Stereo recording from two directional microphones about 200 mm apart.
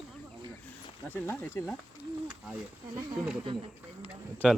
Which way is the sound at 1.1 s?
10° left (ahead or behind).